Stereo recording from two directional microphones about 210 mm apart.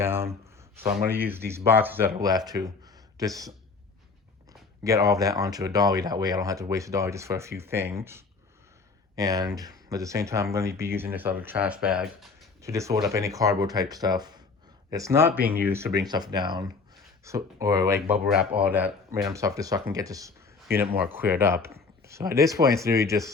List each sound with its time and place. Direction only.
0.0 s speech: 10° right (ahead or behind)
4.8 s speech: 15° right (ahead or behind)
12.6 s speech: 15° right (ahead or behind)